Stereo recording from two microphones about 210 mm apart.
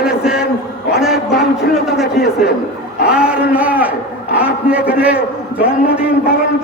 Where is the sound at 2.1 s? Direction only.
50° left (ahead or behind).